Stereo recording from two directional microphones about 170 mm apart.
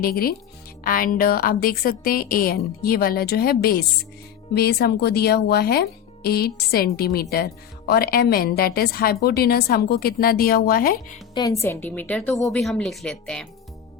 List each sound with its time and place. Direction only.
0.0 s a woman's voice: 60° left (ahead or behind)
11.6 s a woman's voice: 10° left (ahead or behind)